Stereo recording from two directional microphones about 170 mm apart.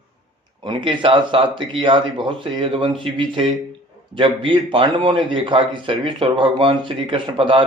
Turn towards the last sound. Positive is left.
turn(degrees=-30)  # may be behind; listen again after turning